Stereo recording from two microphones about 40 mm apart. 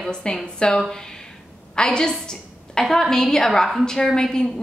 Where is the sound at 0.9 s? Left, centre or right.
Centre.